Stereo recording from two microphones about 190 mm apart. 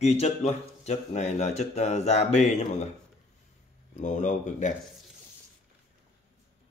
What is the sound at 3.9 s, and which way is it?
Speech, 40° left (ahead or behind).